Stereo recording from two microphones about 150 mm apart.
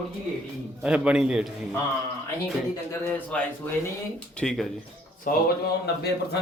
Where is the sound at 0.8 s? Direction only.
5° right (ahead or behind).